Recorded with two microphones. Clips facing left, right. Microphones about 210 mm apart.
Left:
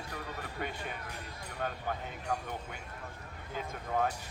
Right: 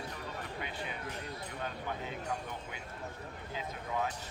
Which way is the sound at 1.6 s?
50° left (ahead or behind).